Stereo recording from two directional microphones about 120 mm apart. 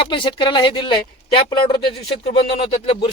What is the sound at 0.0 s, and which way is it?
Speech, 45° left (ahead or behind).